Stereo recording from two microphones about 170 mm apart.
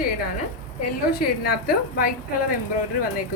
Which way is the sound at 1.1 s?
65° left (ahead or behind).